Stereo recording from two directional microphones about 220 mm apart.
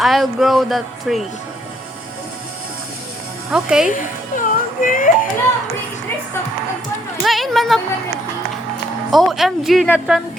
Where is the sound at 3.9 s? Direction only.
35° left (ahead or behind).